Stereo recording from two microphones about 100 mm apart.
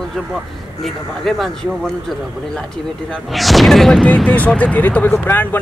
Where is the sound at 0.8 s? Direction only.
Centre (ahead or behind).